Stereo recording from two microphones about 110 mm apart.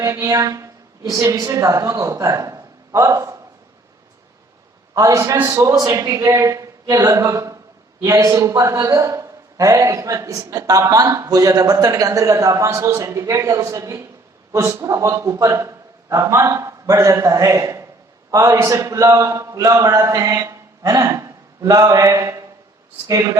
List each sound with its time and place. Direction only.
0.0 s a woman's voice: 30° right (ahead or behind)
4.9 s a man's voice: 30° right (ahead or behind)